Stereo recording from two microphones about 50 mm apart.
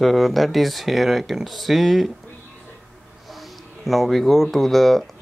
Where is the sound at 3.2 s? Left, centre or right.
Centre.